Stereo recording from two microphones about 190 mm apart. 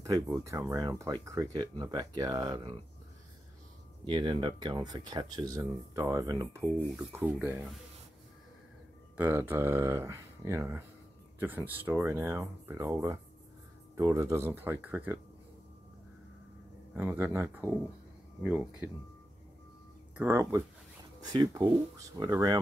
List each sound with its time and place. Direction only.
0.0 s speech: 20° right (ahead or behind)
4.0 s speech: 25° right (ahead or behind); by 7.5 s 10° right (ahead or behind)
9.1 s speech: 10° right (ahead or behind)
16.9 s speech: 10° right (ahead or behind)
20.2 s speech: 15° right (ahead or behind)